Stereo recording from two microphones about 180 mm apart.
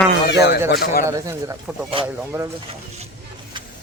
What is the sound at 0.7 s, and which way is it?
Speech, 55° left (ahead or behind).